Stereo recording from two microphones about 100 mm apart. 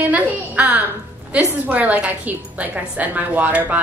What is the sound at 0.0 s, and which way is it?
A woman's voice, 15° right (ahead or behind).